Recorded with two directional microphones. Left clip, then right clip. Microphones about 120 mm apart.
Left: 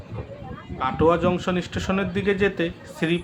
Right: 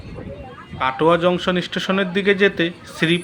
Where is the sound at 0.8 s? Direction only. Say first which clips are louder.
Right 4 dB; 30° right (ahead or behind).